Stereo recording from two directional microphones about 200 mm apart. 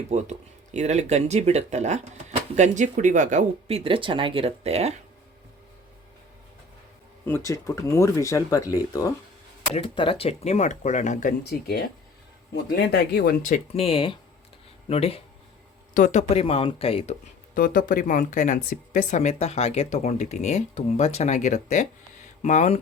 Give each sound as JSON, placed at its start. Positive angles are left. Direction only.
{"t": 0.1, "sound": "speech", "side_deg": -35}
{"t": 7.3, "sound": "speech", "side_deg": 15}
{"t": 13.7, "sound": "speech", "side_deg": 30}
{"t": 17.5, "sound": "speech", "side_deg": 45}